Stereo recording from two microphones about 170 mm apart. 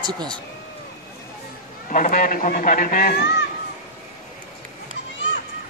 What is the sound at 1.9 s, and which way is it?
A man's voice, 55° left (ahead or behind).